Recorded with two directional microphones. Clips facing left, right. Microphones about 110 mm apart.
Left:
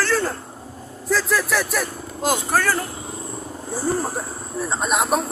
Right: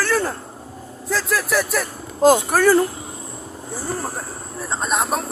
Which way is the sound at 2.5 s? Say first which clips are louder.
Right 6 dB; 15° right (ahead or behind).